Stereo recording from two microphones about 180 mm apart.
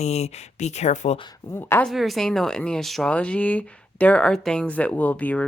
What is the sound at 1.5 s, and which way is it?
Speech, 10° left (ahead or behind).